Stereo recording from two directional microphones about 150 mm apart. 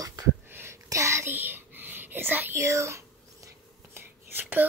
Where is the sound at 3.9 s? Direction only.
15° right (ahead or behind).